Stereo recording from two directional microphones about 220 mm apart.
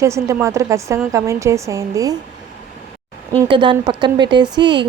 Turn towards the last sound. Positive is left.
turn(degrees=-20)  # may be behind; listen again after turning